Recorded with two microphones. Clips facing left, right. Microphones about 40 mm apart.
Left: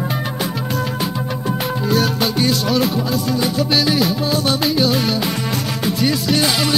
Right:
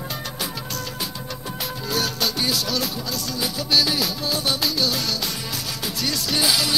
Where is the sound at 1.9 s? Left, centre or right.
Centre.